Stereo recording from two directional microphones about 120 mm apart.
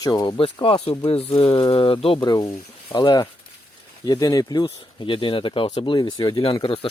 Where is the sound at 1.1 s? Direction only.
50° left (ahead or behind).